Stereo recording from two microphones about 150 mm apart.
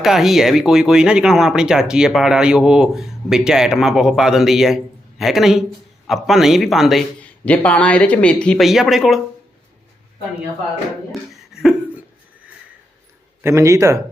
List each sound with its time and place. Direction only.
0.0 s speech: centre (ahead or behind)
11.1 s a sound: 5° right (ahead or behind)
13.4 s speech: 20° right (ahead or behind)